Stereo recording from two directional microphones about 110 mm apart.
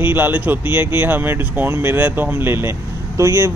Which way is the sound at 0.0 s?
20° right (ahead or behind).